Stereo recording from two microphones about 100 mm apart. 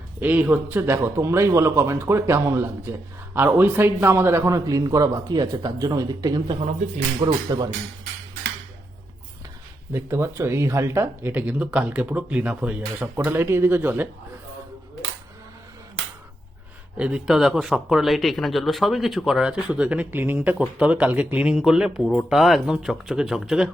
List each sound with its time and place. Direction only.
0.2 s a man's voice: 20° right (ahead or behind); by 7.4 s 50° right (ahead or behind)
9.9 s speech: 25° right (ahead or behind)
17.0 s speech: 10° right (ahead or behind)